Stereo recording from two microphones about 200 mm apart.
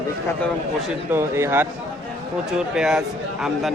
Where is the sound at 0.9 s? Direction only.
10° right (ahead or behind).